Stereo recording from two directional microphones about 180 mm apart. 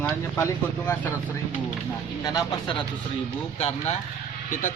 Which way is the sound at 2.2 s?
20° left (ahead or behind).